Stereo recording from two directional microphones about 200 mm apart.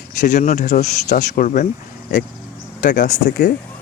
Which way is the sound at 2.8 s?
40° left (ahead or behind).